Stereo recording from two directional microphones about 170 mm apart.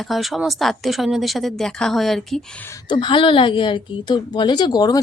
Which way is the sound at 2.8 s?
30° left (ahead or behind).